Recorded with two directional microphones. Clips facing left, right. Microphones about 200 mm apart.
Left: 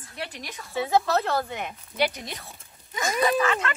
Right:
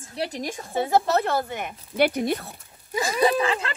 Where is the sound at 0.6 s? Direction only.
20° right (ahead or behind).